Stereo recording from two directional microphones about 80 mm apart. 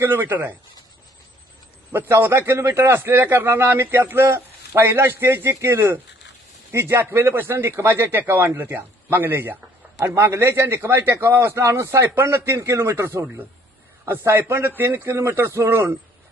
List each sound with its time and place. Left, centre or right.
0.0 s speech: right
1.9 s a man's voice: right